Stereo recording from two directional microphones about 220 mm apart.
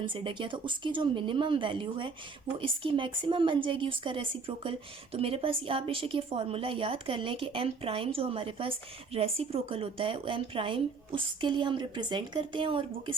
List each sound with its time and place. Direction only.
0.0 s a woman's voice: 20° right (ahead or behind)